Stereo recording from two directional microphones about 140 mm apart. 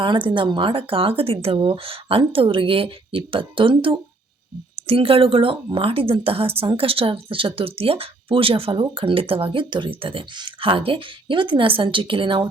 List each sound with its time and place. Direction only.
0.0 s a woman's voice: 35° right (ahead or behind)